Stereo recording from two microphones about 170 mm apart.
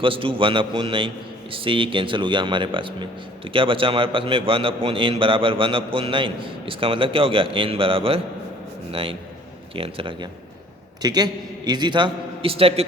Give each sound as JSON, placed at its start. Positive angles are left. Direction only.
{"t": 0.0, "sound": "a man's voice", "side_deg": -30}